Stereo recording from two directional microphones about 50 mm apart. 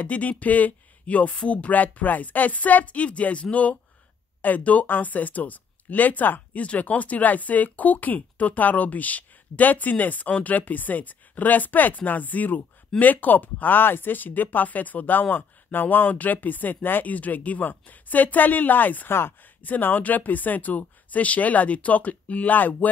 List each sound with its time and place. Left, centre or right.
0.0 s speech: left
19.0 s speech: left
19.4 s speech: left